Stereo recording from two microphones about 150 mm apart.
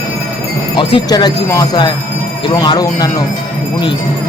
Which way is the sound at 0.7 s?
35° left (ahead or behind).